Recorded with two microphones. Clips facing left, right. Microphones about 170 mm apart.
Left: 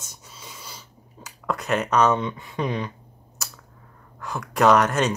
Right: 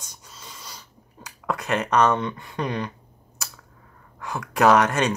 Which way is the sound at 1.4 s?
Centre (ahead or behind).